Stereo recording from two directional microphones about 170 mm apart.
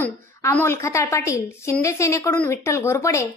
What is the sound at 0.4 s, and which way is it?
A woman's voice, 15° left (ahead or behind).